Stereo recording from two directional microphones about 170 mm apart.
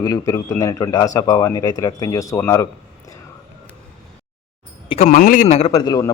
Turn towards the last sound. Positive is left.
turn(degrees=25)  # may be behind; listen again after turning